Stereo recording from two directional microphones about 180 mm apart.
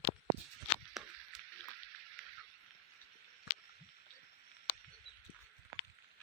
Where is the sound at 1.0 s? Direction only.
Centre (ahead or behind).